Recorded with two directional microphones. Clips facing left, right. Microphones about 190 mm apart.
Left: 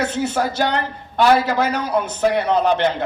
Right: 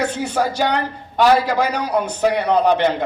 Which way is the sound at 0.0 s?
15° right (ahead or behind).